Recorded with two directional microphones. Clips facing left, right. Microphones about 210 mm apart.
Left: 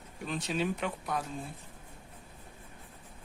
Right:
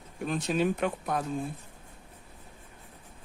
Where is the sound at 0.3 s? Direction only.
50° right (ahead or behind).